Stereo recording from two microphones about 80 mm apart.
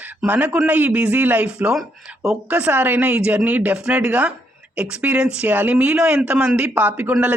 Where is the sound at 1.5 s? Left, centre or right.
Centre.